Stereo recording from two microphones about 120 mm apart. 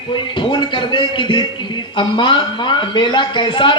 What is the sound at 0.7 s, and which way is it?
Speech, 45° left (ahead or behind).